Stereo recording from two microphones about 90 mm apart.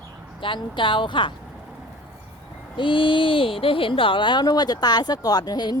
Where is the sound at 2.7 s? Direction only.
70° left (ahead or behind).